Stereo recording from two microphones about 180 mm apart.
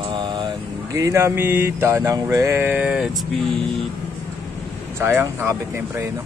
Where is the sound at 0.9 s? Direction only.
15° right (ahead or behind).